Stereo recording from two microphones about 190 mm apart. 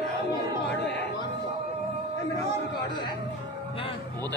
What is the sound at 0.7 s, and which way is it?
Music, 65° left (ahead or behind).